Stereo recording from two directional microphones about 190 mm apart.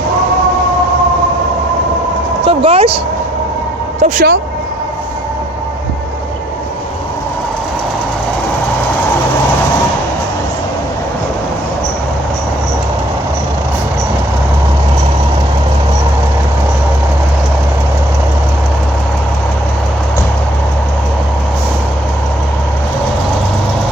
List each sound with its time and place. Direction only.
2.4 s speech: 30° right (ahead or behind)
4.0 s speech: 40° right (ahead or behind)